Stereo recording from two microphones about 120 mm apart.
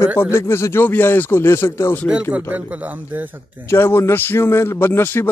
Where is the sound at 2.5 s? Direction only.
15° right (ahead or behind).